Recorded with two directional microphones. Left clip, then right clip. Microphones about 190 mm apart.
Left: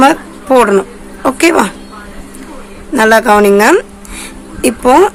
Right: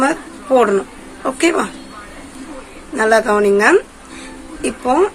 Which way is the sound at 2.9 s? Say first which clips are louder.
Left 6 dB; 40° left (ahead or behind).